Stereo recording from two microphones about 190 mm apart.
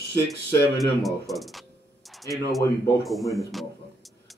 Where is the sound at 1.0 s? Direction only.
Centre (ahead or behind).